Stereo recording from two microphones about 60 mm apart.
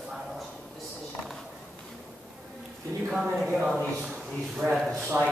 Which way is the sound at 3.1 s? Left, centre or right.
Centre.